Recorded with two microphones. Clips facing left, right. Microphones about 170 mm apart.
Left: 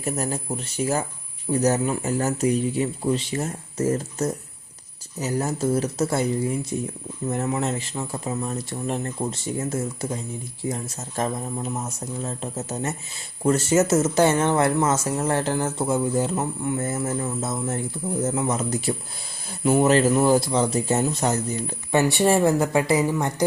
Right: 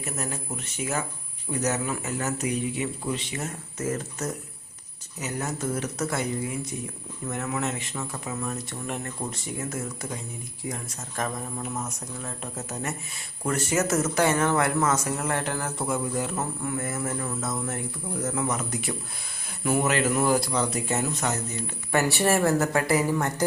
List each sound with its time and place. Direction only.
0.0 s speech: 35° left (ahead or behind)
21.9 s speech: 20° left (ahead or behind)